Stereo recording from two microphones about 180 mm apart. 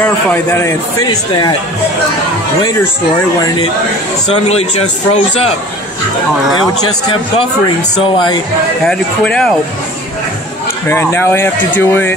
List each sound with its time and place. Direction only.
0.0 s speech: 10° left (ahead or behind)
1.0 s speech: 25° left (ahead or behind)
4.5 s a man's voice: 35° left (ahead or behind)
8.8 s speech: 5° left (ahead or behind)
10.9 s speech: 15° left (ahead or behind)